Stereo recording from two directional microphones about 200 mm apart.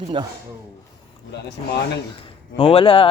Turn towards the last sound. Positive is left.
turn(degrees=30)  # may be behind; listen again after turning